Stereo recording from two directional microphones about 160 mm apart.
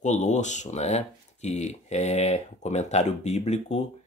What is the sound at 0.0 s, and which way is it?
Speech, 50° left (ahead or behind).